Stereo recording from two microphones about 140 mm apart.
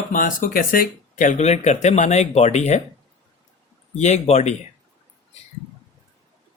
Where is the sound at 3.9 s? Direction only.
55° left (ahead or behind).